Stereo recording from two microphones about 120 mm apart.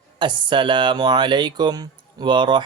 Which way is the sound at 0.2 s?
40° right (ahead or behind).